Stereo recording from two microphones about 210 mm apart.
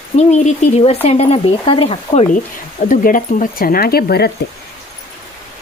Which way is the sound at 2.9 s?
40° left (ahead or behind).